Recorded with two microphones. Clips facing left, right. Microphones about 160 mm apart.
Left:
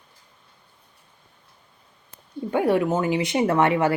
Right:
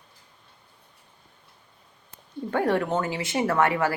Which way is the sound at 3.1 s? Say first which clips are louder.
Left 4 dB; 20° left (ahead or behind).